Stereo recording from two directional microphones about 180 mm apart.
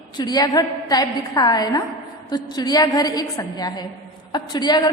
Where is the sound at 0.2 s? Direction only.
20° left (ahead or behind).